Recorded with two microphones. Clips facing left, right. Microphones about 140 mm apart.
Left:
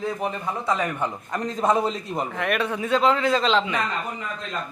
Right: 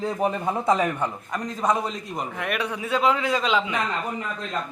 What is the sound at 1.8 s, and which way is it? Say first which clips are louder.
Speech: left 4 dB; 25° left (ahead or behind).